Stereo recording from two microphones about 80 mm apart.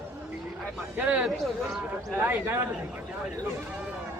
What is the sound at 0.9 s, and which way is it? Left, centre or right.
Speech, centre.